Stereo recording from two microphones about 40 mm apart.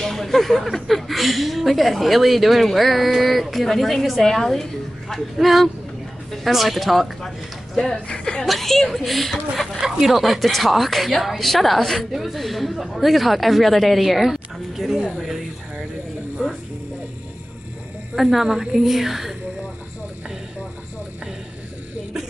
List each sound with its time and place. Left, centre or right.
0.0 s a sound: centre
0.7 s a woman's voice: centre
7.2 s a woman's voice: centre
8.5 s a woman's voice: centre
9.8 s a woman's voice: centre
18.1 s a woman's voice: centre